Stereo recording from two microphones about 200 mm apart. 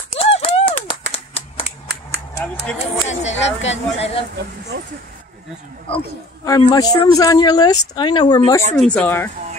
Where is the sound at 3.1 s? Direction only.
35° left (ahead or behind).